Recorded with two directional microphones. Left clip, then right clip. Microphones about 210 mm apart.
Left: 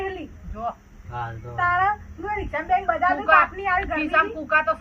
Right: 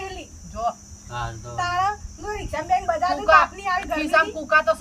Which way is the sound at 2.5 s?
30° right (ahead or behind).